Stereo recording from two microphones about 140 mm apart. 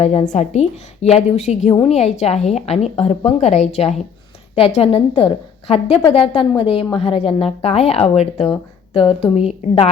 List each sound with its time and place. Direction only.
0.0 s a woman's voice: 50° left (ahead or behind)